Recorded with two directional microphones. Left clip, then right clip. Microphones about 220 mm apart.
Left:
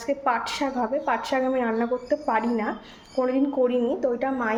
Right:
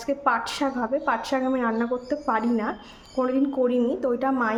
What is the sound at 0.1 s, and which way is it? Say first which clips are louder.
A woman's voice: right 1 dB; 15° right (ahead or behind).